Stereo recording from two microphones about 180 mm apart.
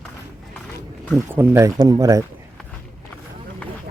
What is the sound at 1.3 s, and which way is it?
Speech, 15° right (ahead or behind).